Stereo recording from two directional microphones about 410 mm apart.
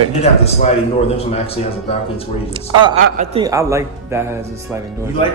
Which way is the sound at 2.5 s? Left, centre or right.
Centre.